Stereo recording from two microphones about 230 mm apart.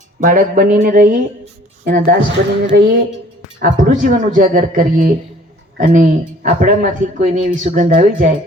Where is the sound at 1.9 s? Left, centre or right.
Right.